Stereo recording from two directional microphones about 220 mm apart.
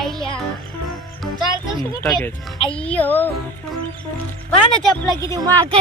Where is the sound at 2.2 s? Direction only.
Centre (ahead or behind).